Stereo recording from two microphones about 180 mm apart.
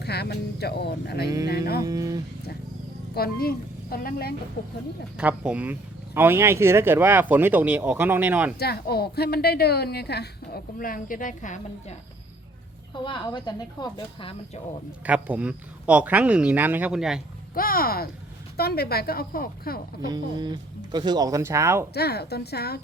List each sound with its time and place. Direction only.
0.0 s a woman's voice: 65° left (ahead or behind)
1.8 s speech: 20° right (ahead or behind)
3.2 s a woman's voice: 55° left (ahead or behind)
5.1 s speech: 5° right (ahead or behind)
8.5 s a woman's voice: 60° left (ahead or behind); by 11.9 s 45° left (ahead or behind)
12.9 s speech: 25° left (ahead or behind)
15.0 s speech: 10° right (ahead or behind)
17.5 s a woman's voice: 55° left (ahead or behind)
20.1 s speech: 25° right (ahead or behind)
21.9 s a woman's voice: 65° left (ahead or behind)